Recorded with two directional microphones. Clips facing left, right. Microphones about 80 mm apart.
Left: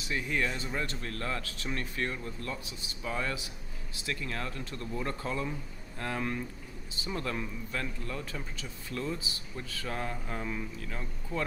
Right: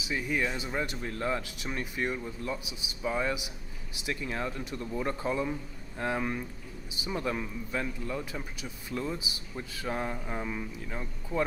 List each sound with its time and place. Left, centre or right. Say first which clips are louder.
0.0 s a man's voice: right 1 dB; centre